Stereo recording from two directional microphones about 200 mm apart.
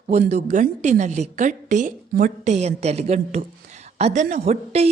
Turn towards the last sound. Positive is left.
turn(degrees=-30)  # may be behind; listen again after turning